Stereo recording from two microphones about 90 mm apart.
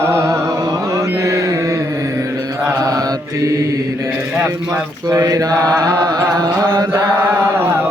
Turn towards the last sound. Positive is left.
turn(degrees=-45)  # may be behind; listen again after turning